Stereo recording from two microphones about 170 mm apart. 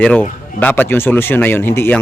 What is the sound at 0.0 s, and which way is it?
Speech, 10° left (ahead or behind).